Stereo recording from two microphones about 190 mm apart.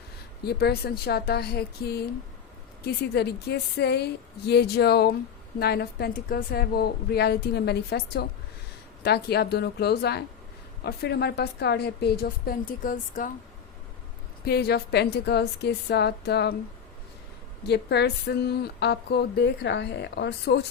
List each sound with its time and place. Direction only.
0.4 s speech: 55° left (ahead or behind)
14.4 s speech: 55° left (ahead or behind)
17.6 s speech: 60° left (ahead or behind)